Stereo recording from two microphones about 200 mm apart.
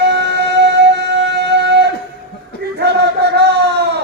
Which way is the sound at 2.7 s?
55° right (ahead or behind).